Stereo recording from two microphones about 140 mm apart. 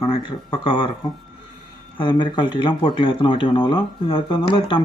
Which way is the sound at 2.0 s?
35° left (ahead or behind).